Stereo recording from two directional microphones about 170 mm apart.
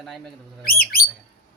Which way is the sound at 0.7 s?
60° left (ahead or behind).